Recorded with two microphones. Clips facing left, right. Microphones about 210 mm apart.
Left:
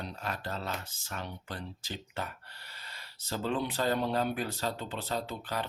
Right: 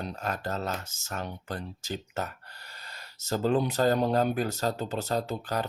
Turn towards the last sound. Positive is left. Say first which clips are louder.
# right 5 dB
turn(degrees=-40)  # may be behind; listen again after turning